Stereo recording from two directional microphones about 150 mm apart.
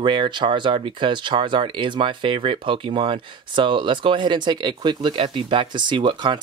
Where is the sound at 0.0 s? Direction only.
30° right (ahead or behind).